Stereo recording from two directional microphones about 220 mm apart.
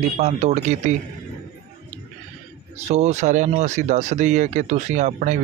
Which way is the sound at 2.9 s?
30° right (ahead or behind).